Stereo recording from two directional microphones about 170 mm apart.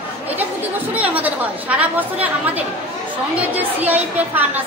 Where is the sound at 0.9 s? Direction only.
10° right (ahead or behind).